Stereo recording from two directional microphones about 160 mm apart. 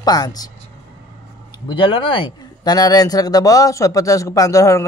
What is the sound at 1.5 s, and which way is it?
Speech, 30° left (ahead or behind).